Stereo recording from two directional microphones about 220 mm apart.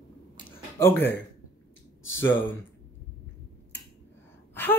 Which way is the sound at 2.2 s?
60° left (ahead or behind).